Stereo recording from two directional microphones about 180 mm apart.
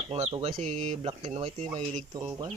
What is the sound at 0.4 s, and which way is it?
Speech, 40° right (ahead or behind).